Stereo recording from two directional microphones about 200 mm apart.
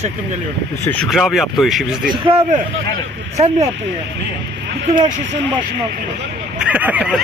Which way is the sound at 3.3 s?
30° right (ahead or behind).